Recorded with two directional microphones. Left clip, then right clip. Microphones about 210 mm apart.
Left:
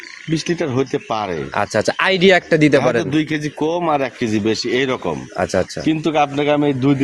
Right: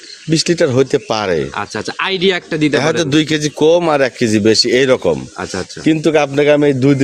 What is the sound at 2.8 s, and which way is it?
A man's voice, 55° right (ahead or behind).